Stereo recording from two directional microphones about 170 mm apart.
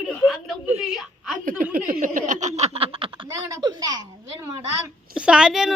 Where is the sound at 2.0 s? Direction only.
50° right (ahead or behind); by 4.0 s 25° right (ahead or behind).